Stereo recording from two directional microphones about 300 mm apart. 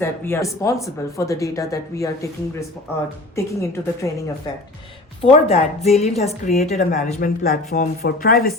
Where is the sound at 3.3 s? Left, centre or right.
Centre.